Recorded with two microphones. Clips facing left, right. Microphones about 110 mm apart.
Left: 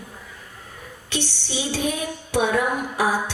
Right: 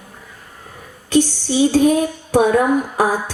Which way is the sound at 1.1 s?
45° right (ahead or behind).